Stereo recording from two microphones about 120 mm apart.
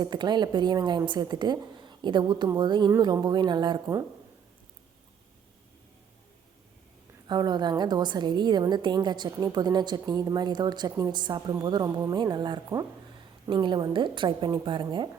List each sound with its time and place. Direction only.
0.0 s a woman's voice: 40° right (ahead or behind)
7.3 s a woman's voice: 35° right (ahead or behind)